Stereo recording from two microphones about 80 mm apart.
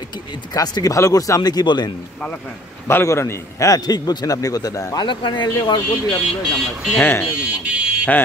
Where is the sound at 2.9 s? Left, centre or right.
Left.